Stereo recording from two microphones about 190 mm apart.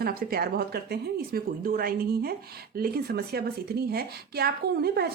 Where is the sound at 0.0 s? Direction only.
50° right (ahead or behind).